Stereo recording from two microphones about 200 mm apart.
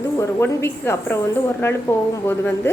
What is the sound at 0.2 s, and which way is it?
A woman's voice, 15° left (ahead or behind).